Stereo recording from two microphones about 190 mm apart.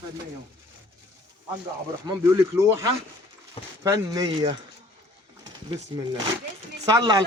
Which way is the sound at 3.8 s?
20° right (ahead or behind).